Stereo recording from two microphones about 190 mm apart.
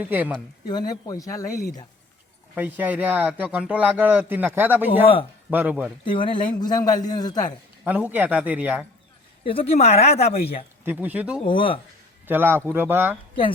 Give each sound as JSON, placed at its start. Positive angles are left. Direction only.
{"t": 0.0, "sound": "speech", "side_deg": -10}
{"t": 0.7, "sound": "a man's voice", "side_deg": 20}
{"t": 2.6, "sound": "speech", "side_deg": -10}
{"t": 6.1, "sound": "a man's voice", "side_deg": 25}
{"t": 7.9, "sound": "speech", "side_deg": -10}
{"t": 9.4, "sound": "speech", "side_deg": 30}
{"t": 10.8, "sound": "speech", "side_deg": -10}
{"t": 11.4, "sound": "a man's voice", "side_deg": 25}
{"t": 12.2, "sound": "a man's voice", "side_deg": -10}